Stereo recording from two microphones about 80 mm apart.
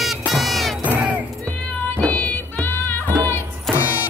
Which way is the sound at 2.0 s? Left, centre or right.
Centre.